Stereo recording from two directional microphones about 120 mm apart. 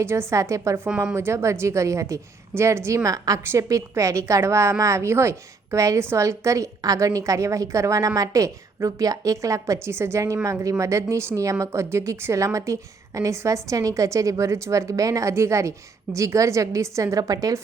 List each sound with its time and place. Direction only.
0.0 s a woman's voice: 20° right (ahead or behind)
0.9 s speech: 5° right (ahead or behind)
1.1 s a woman's voice: 20° right (ahead or behind)